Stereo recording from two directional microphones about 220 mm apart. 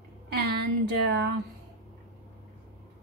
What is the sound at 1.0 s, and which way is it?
Speech, 45° right (ahead or behind).